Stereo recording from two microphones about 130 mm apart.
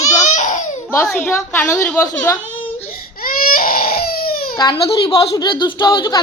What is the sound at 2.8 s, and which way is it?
Baby cry, 90° left.